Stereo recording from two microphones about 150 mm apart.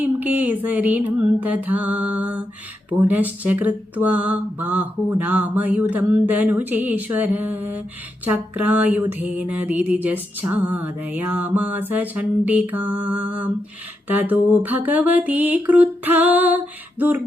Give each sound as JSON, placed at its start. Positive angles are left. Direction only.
{"t": 0.0, "sound": "mantra", "side_deg": -10}